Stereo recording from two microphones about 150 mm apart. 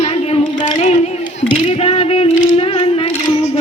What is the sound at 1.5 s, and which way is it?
Music, 40° left (ahead or behind).